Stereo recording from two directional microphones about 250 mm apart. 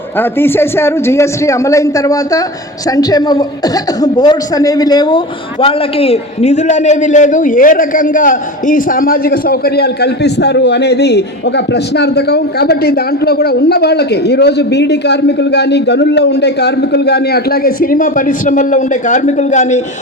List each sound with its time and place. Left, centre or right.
0.2 s a man's voice: centre; by 19.8 s left